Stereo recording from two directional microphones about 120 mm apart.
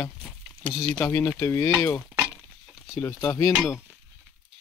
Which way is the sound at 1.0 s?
20° left (ahead or behind).